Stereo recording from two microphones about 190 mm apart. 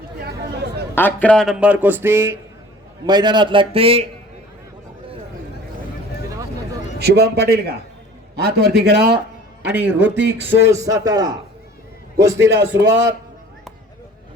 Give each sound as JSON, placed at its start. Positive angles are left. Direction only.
{"t": 0.2, "sound": "a sound", "side_deg": -60}
{"t": 0.9, "sound": "speech", "side_deg": 10}
{"t": 3.1, "sound": "a man's voice", "side_deg": -20}
{"t": 6.2, "sound": "a sound", "side_deg": -15}
{"t": 7.0, "sound": "speech", "side_deg": -55}
{"t": 10.6, "sound": "speech", "side_deg": -15}
{"t": 12.5, "sound": "speech", "side_deg": -65}